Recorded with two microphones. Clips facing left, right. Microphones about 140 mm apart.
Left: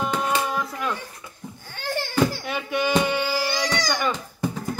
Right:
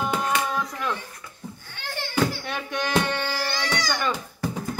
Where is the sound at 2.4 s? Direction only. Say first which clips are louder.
Left 4 dB; 5° left (ahead or behind).